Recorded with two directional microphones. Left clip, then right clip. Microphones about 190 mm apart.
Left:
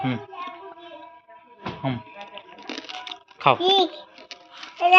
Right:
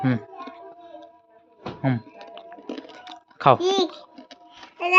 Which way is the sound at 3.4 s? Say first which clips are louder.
Right 2 dB; 55° right (ahead or behind).